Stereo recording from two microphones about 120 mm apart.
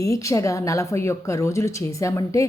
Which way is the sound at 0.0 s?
25° left (ahead or behind).